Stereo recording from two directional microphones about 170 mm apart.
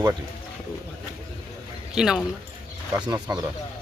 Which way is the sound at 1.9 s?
5° right (ahead or behind).